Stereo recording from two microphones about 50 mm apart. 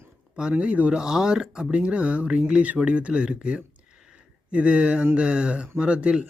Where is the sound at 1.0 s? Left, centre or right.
Centre.